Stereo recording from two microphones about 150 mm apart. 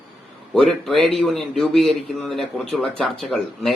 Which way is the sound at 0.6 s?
Centre (ahead or behind).